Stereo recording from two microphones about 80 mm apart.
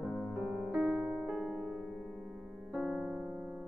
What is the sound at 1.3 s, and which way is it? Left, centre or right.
Music, centre.